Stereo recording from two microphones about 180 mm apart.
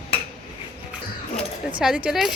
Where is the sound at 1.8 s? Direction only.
5° right (ahead or behind).